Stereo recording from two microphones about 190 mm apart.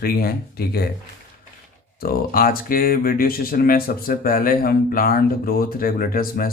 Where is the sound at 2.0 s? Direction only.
50° left (ahead or behind).